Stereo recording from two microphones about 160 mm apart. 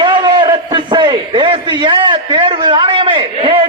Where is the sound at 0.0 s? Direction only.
30° right (ahead or behind).